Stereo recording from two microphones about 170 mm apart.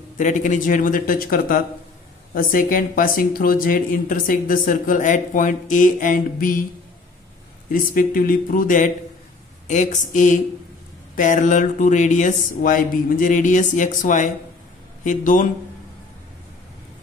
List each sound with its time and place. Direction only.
0.2 s speech: 50° left (ahead or behind)
7.7 s speech: 55° left (ahead or behind)